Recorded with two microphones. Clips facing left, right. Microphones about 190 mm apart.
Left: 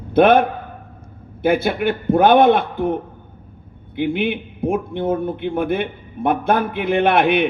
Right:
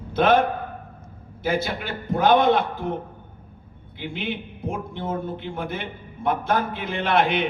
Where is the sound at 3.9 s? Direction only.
55° left (ahead or behind).